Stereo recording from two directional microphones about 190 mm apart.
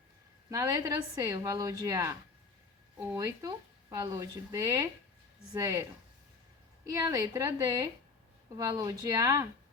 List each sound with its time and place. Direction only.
0.5 s speech: 20° right (ahead or behind)
3.2 s speech: 20° right (ahead or behind)
6.8 s speech: 20° right (ahead or behind)